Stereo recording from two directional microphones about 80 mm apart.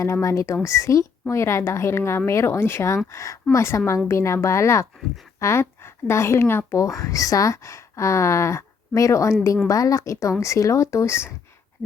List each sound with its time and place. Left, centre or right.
0.0 s a woman's voice: left
6.7 s speech: left